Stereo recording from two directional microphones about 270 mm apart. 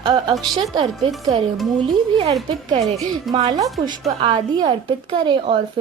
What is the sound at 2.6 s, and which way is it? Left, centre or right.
A woman's voice, right.